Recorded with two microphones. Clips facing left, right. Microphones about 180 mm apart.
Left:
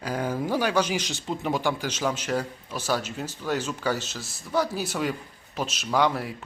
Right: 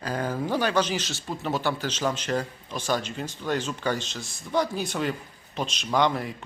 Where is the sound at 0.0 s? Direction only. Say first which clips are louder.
Left 1 dB; 10° left (ahead or behind).